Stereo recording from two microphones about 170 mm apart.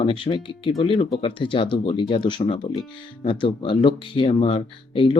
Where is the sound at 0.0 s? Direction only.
30° left (ahead or behind).